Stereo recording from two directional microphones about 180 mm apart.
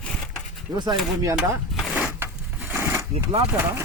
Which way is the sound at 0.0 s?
5° left (ahead or behind).